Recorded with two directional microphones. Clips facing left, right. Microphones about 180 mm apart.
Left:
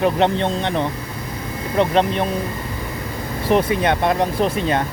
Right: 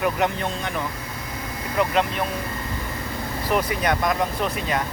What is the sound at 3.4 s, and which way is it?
Speech, 25° left (ahead or behind).